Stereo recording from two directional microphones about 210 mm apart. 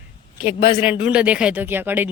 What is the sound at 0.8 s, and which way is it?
Speech, 5° right (ahead or behind).